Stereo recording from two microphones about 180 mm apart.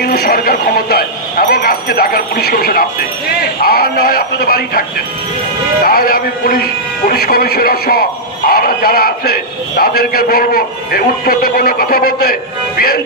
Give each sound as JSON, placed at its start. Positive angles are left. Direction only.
{"t": 0.0, "sound": "speech", "side_deg": 60}
{"t": 5.9, "sound": "speech", "side_deg": 55}